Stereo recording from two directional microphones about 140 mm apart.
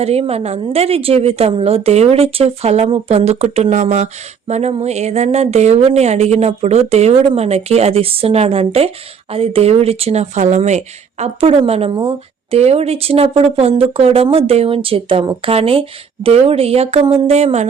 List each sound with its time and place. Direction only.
0.0 s a woman's voice: 45° right (ahead or behind)